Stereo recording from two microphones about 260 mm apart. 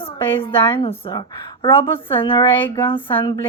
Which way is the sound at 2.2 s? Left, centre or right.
Centre.